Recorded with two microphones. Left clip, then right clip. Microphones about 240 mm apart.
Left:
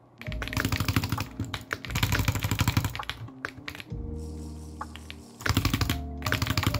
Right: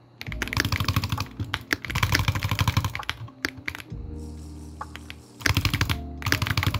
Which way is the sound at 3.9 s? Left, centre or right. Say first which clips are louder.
Left 1 dB; centre.